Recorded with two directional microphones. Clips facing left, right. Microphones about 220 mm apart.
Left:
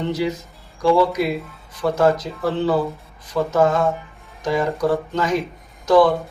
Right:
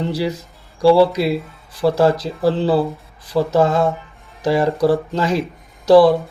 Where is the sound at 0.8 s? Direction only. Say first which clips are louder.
Right 4 dB; 35° right (ahead or behind).